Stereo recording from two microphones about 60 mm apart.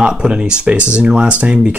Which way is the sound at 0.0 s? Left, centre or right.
Centre.